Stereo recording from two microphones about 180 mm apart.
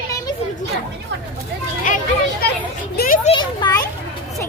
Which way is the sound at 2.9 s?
55° left (ahead or behind).